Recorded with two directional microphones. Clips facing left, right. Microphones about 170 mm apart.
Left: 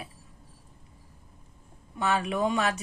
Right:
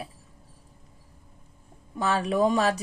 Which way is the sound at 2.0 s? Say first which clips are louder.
Right 3 dB; 35° right (ahead or behind).